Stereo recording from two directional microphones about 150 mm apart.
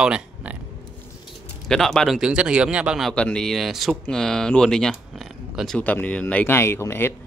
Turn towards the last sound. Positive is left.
turn(degrees=15)  # may be behind; listen again after turning